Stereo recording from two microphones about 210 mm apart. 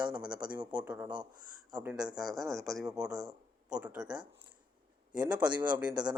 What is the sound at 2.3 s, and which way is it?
Speech, 15° right (ahead or behind).